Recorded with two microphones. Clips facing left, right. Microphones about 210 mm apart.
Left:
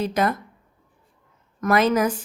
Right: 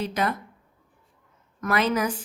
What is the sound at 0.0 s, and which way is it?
Speech, 45° left (ahead or behind).